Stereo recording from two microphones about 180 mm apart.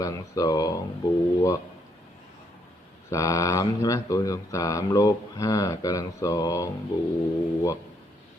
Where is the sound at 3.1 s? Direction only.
20° left (ahead or behind).